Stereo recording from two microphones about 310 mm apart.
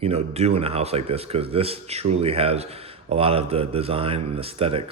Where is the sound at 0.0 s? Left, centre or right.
Centre.